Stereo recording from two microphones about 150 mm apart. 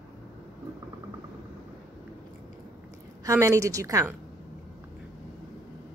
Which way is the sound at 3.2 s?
20° right (ahead or behind).